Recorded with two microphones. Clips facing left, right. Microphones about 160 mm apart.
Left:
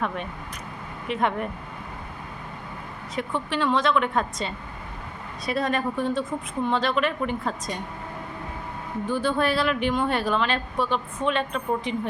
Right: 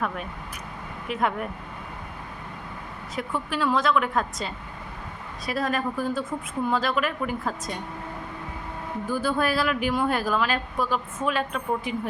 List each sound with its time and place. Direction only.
1.0 s a woman's voice: 5° right (ahead or behind)
3.2 s a woman's voice: 5° right (ahead or behind)
9.0 s a woman's voice: 5° right (ahead or behind)